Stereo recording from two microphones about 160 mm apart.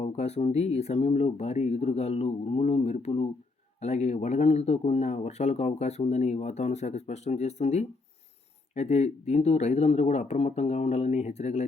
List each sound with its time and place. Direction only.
0.0 s speech: 45° left (ahead or behind)